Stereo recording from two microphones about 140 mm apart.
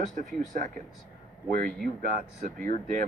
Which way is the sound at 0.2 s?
70° right (ahead or behind).